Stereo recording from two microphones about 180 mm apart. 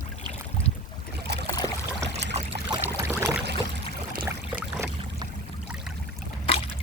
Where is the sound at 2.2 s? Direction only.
35° right (ahead or behind).